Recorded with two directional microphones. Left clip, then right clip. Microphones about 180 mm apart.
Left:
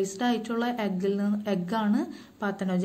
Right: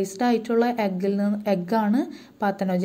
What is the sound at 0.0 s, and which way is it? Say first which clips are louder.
A woman's voice: right 5 dB; 25° right (ahead or behind).